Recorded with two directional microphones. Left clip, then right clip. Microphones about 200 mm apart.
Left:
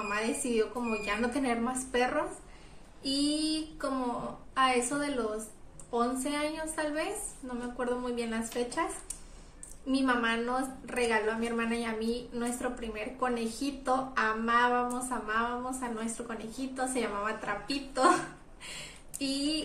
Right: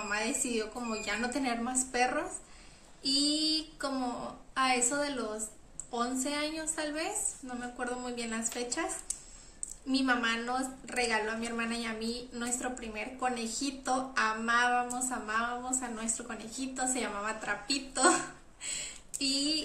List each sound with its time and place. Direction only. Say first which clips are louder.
0.1 s a woman's voice: left 1 dB; 5° right (ahead or behind)
9.8 s a woman's voice: left 1 dB; 10° right (ahead or behind)